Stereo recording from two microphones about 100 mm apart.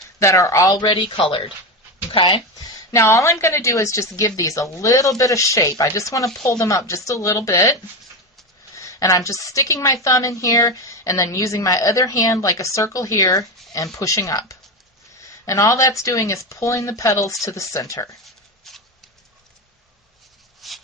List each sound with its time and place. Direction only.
0.2 s a woman's voice: 30° left (ahead or behind)
0.8 s speech: 50° left (ahead or behind); by 1.5 s 65° left (ahead or behind)
2.1 s speech: 50° left (ahead or behind)
2.9 s a woman's voice: 30° left (ahead or behind)
18.7 s a sound: 5° left (ahead or behind)
20.6 s a sound: centre (ahead or behind)